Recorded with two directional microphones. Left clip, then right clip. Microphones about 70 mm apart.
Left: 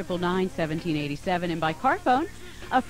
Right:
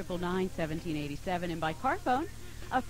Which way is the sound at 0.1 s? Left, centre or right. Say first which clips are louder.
Left 7 dB; centre.